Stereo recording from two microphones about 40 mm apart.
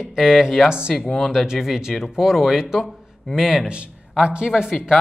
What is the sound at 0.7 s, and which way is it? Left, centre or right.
Speech, centre.